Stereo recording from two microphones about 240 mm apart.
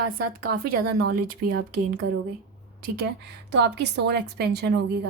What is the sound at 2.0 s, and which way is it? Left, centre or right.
Speech, right.